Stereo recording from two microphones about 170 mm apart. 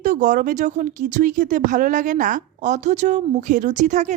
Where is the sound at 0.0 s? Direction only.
50° right (ahead or behind).